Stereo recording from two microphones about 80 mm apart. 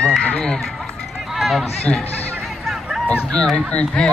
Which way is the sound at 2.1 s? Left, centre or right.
Centre.